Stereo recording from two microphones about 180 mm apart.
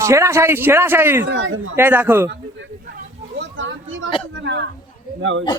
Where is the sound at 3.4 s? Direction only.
90° right.